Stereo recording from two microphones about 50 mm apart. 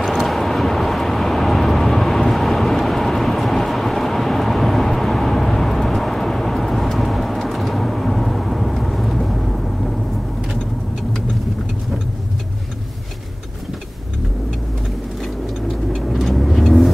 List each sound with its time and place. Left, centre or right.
0.0 s vehicle: centre
16.1 s vehicle: centre